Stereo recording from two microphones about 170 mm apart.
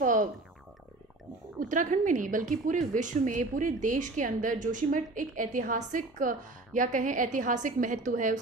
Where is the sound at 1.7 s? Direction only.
50° right (ahead or behind).